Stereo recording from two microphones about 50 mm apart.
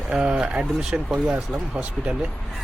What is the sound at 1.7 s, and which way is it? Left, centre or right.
Speech, right.